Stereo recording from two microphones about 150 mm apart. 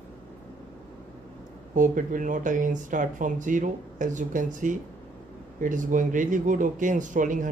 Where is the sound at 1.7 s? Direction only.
60° right (ahead or behind).